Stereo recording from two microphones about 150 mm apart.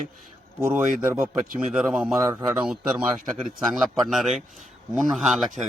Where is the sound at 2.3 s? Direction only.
20° right (ahead or behind).